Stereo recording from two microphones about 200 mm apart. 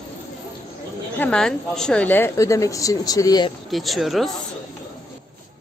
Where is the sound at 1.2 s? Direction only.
5° left (ahead or behind).